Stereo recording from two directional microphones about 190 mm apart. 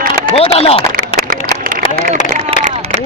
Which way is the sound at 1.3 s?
50° right (ahead or behind).